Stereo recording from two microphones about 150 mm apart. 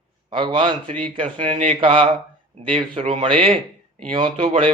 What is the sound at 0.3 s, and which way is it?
Speech, 35° right (ahead or behind).